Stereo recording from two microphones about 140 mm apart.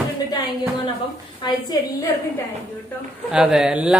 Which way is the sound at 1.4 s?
30° left (ahead or behind).